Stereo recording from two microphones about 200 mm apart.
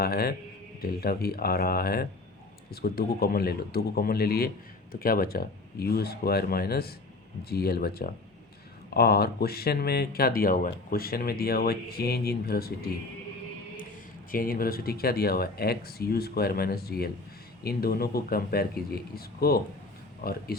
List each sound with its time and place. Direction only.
0.0 s speech: 50° left (ahead or behind)
14.3 s speech: 45° left (ahead or behind)